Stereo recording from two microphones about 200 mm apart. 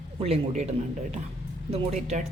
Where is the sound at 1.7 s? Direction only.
35° right (ahead or behind).